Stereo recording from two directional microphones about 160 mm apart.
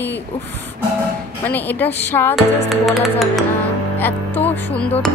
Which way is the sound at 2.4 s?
Centre (ahead or behind).